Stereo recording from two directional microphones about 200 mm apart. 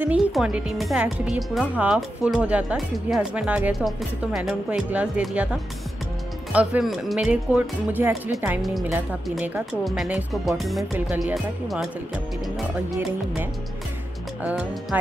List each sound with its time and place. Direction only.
0.0 s speech: 5° right (ahead or behind)
14.4 s speech: 5° right (ahead or behind)